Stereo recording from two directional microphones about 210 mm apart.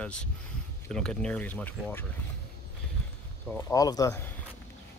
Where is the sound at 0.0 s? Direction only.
5° left (ahead or behind).